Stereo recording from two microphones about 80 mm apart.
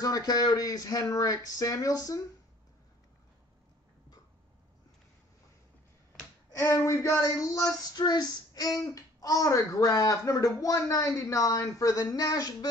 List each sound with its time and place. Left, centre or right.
0.0 s speech: left
6.6 s speech: left